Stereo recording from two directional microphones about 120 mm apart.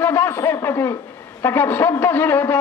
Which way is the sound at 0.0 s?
20° left (ahead or behind).